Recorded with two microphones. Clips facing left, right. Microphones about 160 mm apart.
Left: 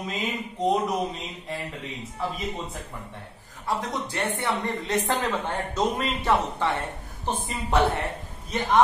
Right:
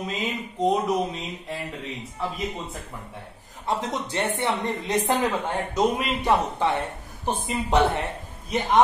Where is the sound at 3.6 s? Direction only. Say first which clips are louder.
Right 1 dB; 25° right (ahead or behind).